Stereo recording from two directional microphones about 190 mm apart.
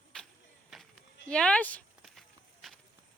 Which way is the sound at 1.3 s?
5° left (ahead or behind).